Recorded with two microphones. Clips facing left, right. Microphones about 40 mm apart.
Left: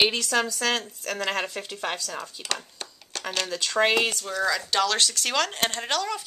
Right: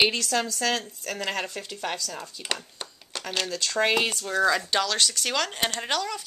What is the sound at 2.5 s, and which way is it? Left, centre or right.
Speech, centre.